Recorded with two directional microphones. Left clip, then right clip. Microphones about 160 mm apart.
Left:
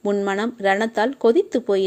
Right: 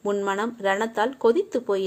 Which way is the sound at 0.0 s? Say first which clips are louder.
Left 3 dB; 45° left (ahead or behind).